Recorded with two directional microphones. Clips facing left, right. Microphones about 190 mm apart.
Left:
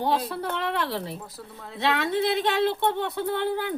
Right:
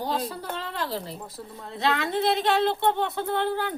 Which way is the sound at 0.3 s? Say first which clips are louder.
Left 5 dB; 65° left (ahead or behind).